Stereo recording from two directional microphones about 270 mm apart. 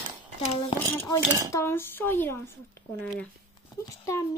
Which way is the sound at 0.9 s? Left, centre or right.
Centre.